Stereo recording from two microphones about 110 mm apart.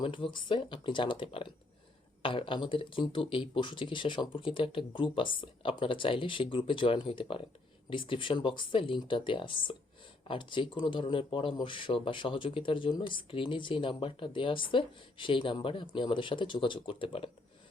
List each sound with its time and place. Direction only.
0.0 s speech: 50° left (ahead or behind)